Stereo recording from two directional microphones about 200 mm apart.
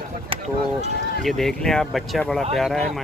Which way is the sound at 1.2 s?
Centre (ahead or behind).